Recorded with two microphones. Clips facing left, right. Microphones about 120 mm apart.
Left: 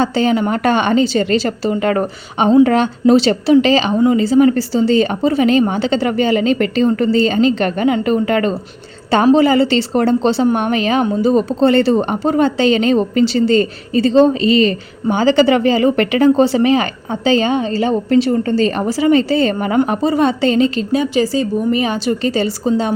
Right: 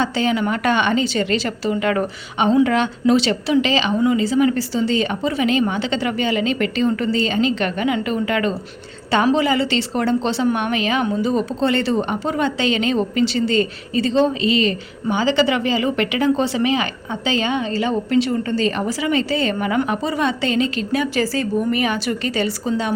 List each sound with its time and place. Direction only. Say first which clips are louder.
0.0 s a woman's voice: left 5 dB; 35° left (ahead or behind)